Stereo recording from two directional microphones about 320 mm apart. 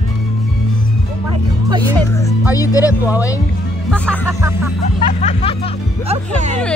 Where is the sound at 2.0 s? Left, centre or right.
Centre.